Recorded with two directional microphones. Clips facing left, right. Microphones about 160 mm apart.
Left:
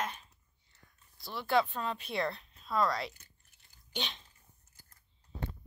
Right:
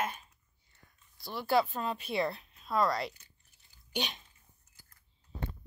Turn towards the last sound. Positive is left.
turn(degrees=-10)  # may be behind; listen again after turning